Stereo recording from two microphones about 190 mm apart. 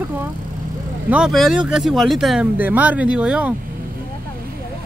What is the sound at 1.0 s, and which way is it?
Speech, 5° right (ahead or behind).